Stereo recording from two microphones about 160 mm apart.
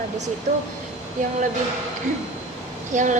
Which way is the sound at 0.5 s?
65° right (ahead or behind).